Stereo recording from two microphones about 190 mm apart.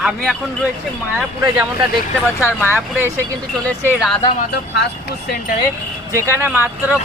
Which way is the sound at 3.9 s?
5° right (ahead or behind).